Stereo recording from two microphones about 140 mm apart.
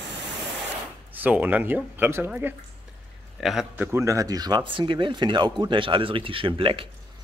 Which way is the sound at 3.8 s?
15° right (ahead or behind).